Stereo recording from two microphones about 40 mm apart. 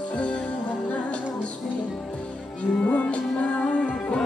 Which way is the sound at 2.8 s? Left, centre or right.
Left.